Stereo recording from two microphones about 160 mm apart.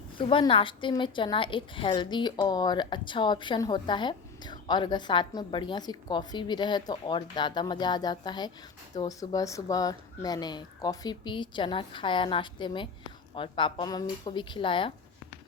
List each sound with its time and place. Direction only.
0.2 s a woman's voice: 30° left (ahead or behind)